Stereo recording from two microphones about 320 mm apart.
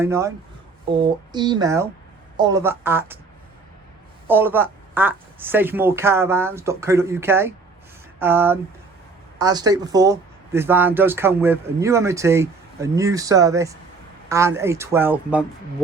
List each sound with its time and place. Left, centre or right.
0.0 s speech: centre
4.3 s speech: centre